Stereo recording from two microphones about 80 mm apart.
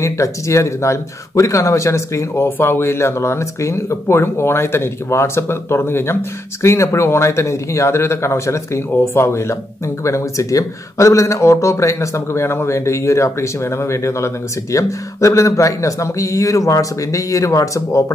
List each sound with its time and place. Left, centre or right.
0.0 s speech: left